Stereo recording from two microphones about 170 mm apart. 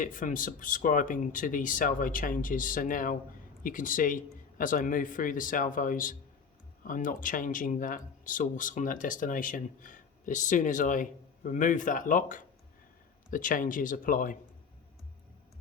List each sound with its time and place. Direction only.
0.0 s speech: 50° left (ahead or behind)